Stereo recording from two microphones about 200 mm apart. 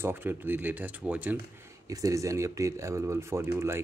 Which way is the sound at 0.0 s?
10° right (ahead or behind).